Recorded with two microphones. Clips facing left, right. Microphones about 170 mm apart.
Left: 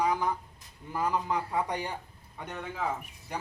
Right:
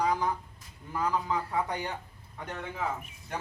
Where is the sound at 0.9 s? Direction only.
10° left (ahead or behind).